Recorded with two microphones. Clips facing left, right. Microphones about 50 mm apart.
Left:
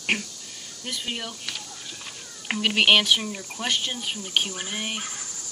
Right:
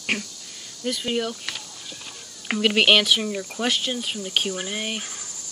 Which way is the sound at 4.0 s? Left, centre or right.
Centre.